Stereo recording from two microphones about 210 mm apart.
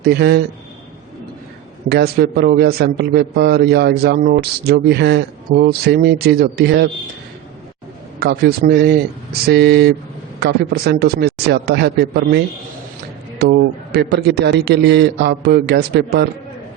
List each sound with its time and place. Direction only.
0.0 s a man's voice: 50° right (ahead or behind)
1.9 s a man's voice: 50° right (ahead or behind)
8.2 s a man's voice: 45° right (ahead or behind)
13.4 s a man's voice: 50° right (ahead or behind)